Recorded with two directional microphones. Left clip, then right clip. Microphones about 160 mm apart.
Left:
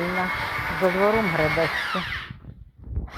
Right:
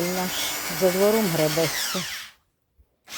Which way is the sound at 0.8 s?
40° right (ahead or behind).